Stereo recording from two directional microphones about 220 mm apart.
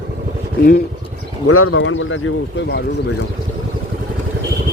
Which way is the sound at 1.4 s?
75° left (ahead or behind).